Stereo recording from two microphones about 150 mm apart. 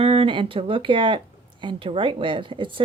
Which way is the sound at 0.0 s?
40° right (ahead or behind).